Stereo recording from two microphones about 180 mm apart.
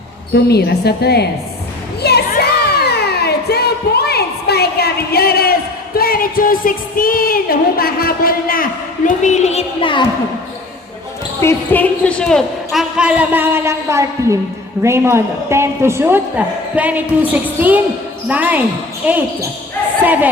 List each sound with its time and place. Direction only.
0.4 s a woman's voice: 65° left (ahead or behind)
2.0 s music: 65° left (ahead or behind)
9.0 s a woman's voice: 40° left (ahead or behind)
11.3 s speech: 10° left (ahead or behind); by 19.5 s 10° right (ahead or behind)